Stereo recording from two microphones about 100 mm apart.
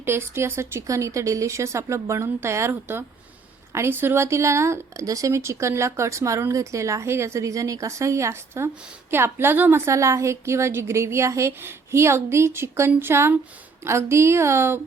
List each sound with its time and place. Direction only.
0.0 s speech: 25° right (ahead or behind)